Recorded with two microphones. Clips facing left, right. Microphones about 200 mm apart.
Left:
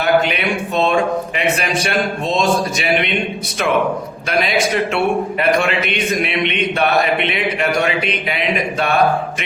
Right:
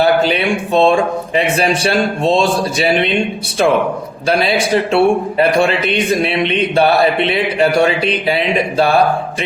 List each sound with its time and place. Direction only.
0.0 s a man's voice: 30° right (ahead or behind)
4.3 s a man's voice: 30° right (ahead or behind)